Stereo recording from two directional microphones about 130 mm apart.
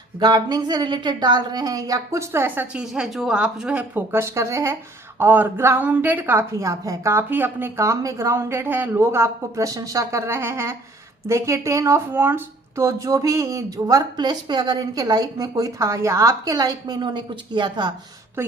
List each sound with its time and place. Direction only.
0.2 s a woman's voice: 35° right (ahead or behind); by 2.8 s 15° right (ahead or behind)
2.8 s a woman's voice: 5° right (ahead or behind); by 17.9 s 35° right (ahead or behind)
18.4 s a woman's voice: 20° right (ahead or behind)